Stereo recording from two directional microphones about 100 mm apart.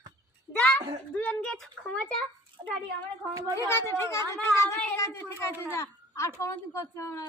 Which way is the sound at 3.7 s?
25° left (ahead or behind).